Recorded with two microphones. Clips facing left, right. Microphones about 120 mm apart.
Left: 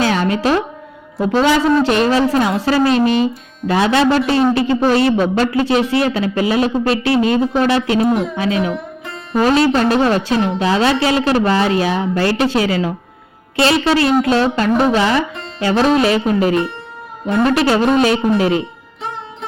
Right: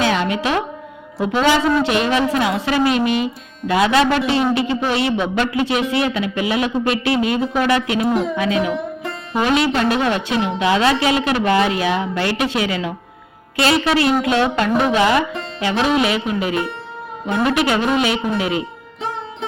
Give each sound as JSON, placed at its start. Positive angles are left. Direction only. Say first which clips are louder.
{"t": 0.0, "sound": "a sound", "louder": "left 3 dB", "side_deg": 35}
{"t": 1.2, "sound": "a woman's voice", "louder": "left 2 dB", "side_deg": 35}
{"t": 8.1, "sound": "speech", "louder": "left 1 dB", "side_deg": 0}
{"t": 9.4, "sound": "a woman's voice", "louder": "left 4 dB", "side_deg": 35}